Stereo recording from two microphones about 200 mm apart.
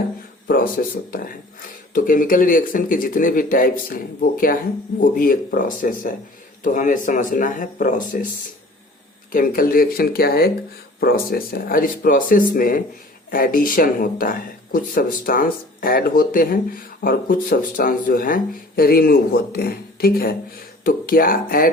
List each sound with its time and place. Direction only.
0.4 s speech: 45° left (ahead or behind)
9.3 s speech: 45° left (ahead or behind)